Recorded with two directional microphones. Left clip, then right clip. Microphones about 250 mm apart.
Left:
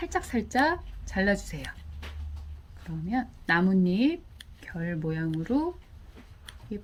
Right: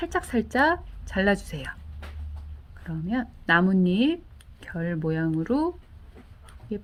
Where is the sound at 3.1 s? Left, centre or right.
Right.